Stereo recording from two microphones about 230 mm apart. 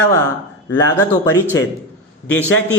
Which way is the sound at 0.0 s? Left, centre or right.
Centre.